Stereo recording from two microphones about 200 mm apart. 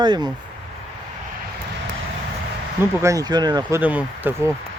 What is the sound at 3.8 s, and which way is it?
Speech, 10° right (ahead or behind).